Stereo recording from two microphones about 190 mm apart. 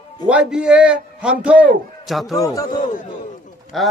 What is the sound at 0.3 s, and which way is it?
A man's voice, 5° right (ahead or behind).